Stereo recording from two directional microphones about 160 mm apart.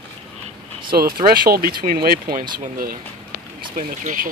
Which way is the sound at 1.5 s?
70° right (ahead or behind).